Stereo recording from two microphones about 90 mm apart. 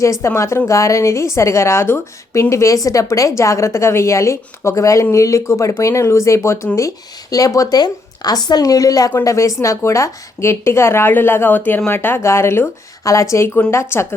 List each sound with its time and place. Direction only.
0.0 s a woman's voice: 35° left (ahead or behind)